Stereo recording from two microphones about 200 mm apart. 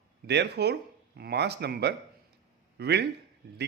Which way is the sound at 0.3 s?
55° right (ahead or behind).